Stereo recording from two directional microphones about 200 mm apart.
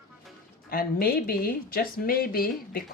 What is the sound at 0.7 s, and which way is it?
Speech, 50° left (ahead or behind).